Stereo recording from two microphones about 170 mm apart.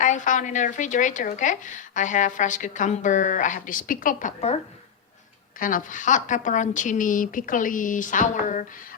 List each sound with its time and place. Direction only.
0.0 s a woman's voice: 45° left (ahead or behind)
5.5 s a woman's voice: 55° left (ahead or behind)